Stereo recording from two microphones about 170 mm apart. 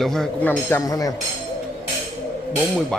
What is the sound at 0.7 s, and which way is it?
Speech, 20° left (ahead or behind).